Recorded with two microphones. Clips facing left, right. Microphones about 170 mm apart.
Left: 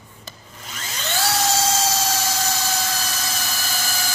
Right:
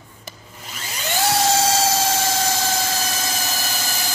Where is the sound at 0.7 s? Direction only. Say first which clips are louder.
Right 2 dB; 15° right (ahead or behind).